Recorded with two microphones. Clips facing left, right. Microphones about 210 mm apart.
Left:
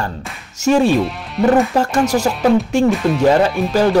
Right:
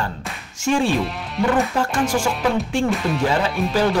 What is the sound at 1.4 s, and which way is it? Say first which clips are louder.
Speech: left 6 dB; centre (ahead or behind).